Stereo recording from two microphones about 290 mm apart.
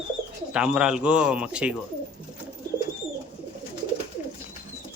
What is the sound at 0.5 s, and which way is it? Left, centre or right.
A man's voice, centre.